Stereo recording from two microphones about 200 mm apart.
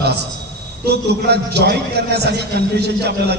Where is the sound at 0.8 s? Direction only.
55° right (ahead or behind).